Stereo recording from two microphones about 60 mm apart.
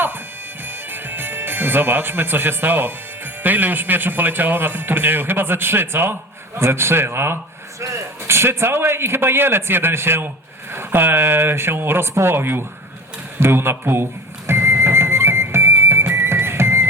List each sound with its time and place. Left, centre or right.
0.6 s music: right
3.4 s a man's voice: right
13.4 s music: right